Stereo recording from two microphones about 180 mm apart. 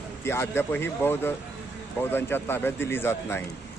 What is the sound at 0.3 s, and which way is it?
Speech, 15° left (ahead or behind).